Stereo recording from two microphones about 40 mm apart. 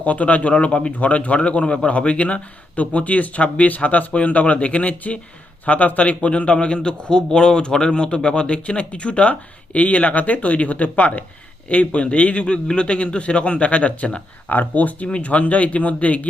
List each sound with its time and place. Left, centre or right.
0.0 s a man's voice: left
14.5 s speech: left
15.0 s speech: left